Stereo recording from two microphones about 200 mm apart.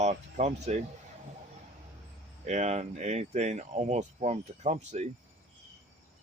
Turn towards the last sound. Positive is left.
turn(degrees=-35)  # may be behind; listen again after turning